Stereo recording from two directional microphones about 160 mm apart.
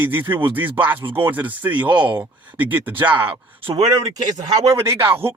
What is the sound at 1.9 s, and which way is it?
Speech, 30° right (ahead or behind).